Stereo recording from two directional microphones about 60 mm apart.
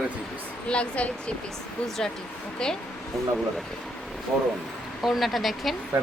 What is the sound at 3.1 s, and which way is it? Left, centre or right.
Speech, centre.